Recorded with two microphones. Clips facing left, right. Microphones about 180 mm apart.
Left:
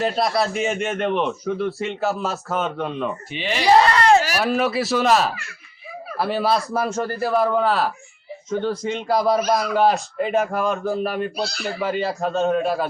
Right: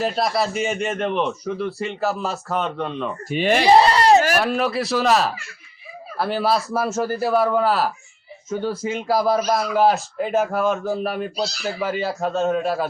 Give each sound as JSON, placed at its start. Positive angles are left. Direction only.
{"t": 0.0, "sound": "speech", "side_deg": 0}
{"t": 3.2, "sound": "speech", "side_deg": -45}
{"t": 4.4, "sound": "speech", "side_deg": 0}